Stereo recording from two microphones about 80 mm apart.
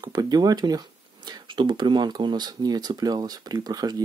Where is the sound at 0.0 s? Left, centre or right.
Right.